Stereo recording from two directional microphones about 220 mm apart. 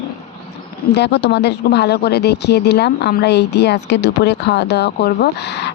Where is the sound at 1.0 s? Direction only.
50° left (ahead or behind).